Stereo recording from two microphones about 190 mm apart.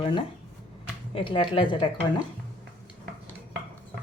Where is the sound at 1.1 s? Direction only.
30° left (ahead or behind).